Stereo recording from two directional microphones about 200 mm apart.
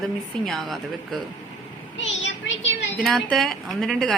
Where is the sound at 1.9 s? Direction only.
70° left (ahead or behind).